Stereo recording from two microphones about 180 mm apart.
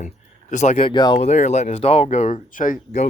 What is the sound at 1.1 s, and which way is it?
Speech, 40° left (ahead or behind).